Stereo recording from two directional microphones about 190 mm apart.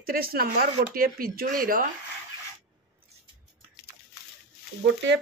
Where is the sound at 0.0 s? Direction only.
50° right (ahead or behind).